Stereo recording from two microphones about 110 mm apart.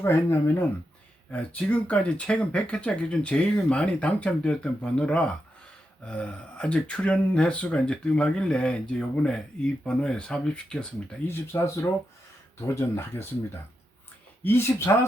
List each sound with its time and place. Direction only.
0.0 s speech: 20° left (ahead or behind)
11.3 s speech: 25° left (ahead or behind)
14.4 s speech: 20° left (ahead or behind)